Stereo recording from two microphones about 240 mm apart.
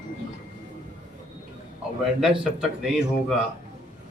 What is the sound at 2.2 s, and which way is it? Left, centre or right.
Speech, centre.